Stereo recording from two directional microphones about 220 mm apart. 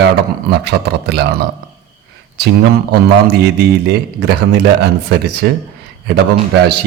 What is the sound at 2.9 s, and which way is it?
A man's voice, 45° right (ahead or behind).